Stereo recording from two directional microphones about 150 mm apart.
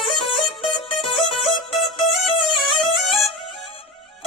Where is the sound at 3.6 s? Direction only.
40° left (ahead or behind).